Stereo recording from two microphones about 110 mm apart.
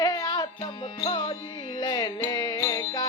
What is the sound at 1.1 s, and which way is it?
Music, 45° left (ahead or behind).